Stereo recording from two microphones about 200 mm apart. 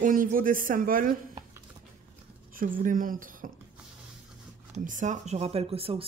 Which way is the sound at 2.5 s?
45° right (ahead or behind).